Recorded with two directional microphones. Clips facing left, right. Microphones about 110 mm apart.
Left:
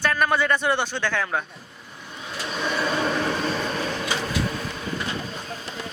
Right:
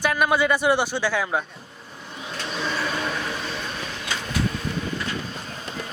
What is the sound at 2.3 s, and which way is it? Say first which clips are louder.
Vehicle: left 1 dB; 5° left (ahead or behind).